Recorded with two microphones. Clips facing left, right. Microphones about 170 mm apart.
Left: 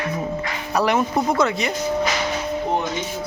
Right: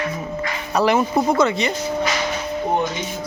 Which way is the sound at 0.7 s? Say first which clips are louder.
Right 2 dB; centre (ahead or behind).